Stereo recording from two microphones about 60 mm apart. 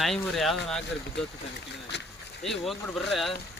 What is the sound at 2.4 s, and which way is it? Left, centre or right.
Speech, centre.